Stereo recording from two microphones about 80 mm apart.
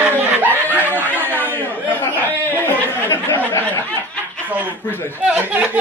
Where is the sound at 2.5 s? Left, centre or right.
Left.